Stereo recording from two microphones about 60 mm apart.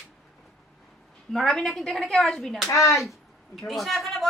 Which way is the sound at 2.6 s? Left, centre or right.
Left.